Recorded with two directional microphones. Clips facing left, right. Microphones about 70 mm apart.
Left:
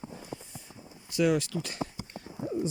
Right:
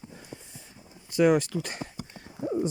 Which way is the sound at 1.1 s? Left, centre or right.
Right.